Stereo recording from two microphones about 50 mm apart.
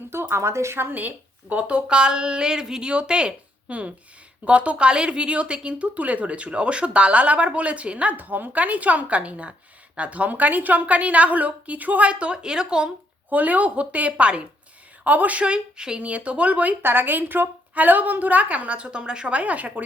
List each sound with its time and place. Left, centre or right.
0.1 s speech: right
0.9 s a woman's voice: right
8.1 s a woman's voice: right; by 12.9 s centre
13.3 s a woman's voice: right
16.8 s a woman's voice: right